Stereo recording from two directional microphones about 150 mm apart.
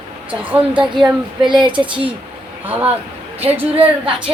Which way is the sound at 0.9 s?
30° right (ahead or behind).